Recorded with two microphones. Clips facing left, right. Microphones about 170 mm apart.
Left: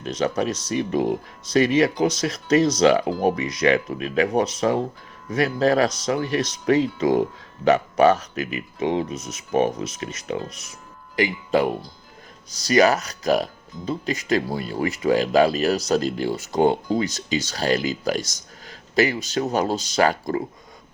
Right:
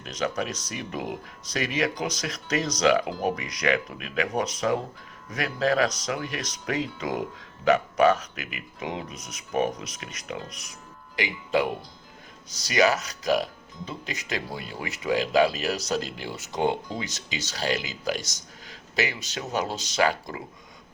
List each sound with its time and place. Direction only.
0.0 s speech: 30° left (ahead or behind)
12.6 s speech: 40° left (ahead or behind)